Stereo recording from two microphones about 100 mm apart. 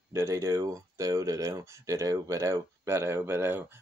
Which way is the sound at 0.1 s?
30° right (ahead or behind).